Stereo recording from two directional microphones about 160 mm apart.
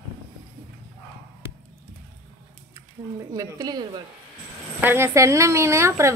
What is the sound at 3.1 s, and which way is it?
Speech, 25° right (ahead or behind).